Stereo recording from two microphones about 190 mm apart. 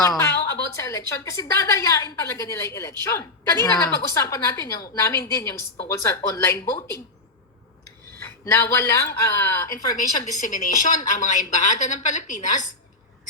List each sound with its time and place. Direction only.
0.2 s a woman's voice: 15° left (ahead or behind)
8.2 s a woman's voice: 15° left (ahead or behind)
10.4 s a woman's voice: 40° left (ahead or behind)